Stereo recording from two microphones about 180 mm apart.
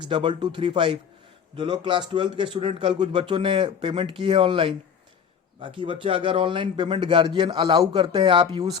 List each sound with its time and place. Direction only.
0.0 s a man's voice: 25° right (ahead or behind)